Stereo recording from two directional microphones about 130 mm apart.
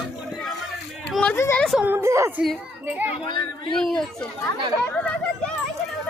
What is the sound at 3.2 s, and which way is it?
Speech, 40° left (ahead or behind).